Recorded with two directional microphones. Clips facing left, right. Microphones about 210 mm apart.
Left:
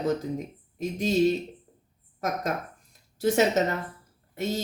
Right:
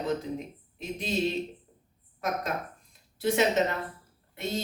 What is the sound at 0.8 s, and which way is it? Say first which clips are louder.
Speech: left 6 dB; 40° left (ahead or behind).